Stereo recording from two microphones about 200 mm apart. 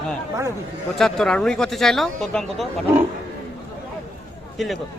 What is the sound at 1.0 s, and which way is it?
Speech, 5° left (ahead or behind).